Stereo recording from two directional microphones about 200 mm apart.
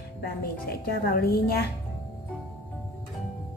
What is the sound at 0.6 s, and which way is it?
Speech, 50° left (ahead or behind).